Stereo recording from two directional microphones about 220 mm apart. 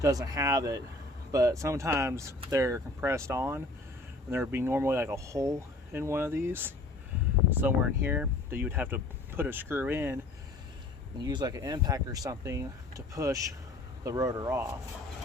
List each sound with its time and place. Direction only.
0.0 s speech: 15° right (ahead or behind)
11.2 s speech: 20° right (ahead or behind)